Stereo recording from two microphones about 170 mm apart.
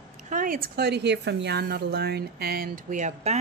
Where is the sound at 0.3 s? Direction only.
55° right (ahead or behind).